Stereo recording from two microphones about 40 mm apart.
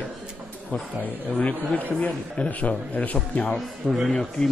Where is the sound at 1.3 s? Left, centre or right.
Left.